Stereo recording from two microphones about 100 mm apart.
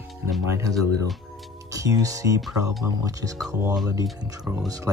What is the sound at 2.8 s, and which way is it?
Speech, 35° right (ahead or behind).